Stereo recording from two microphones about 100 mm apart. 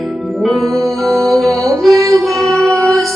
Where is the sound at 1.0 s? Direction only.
Centre (ahead or behind).